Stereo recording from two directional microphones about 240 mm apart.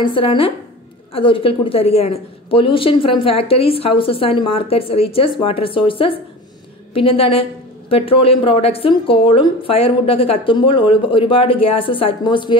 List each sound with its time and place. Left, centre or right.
0.0 s a woman's voice: left